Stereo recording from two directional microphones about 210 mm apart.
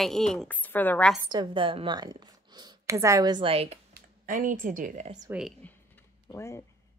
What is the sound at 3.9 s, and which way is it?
Speech, 40° right (ahead or behind).